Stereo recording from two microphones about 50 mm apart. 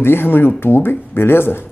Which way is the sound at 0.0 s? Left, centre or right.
Left.